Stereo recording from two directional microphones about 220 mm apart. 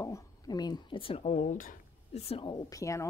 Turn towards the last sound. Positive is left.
turn(degrees=15)  # may be behind; listen again after turning